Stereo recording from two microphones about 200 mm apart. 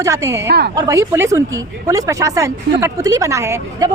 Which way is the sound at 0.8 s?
15° right (ahead or behind).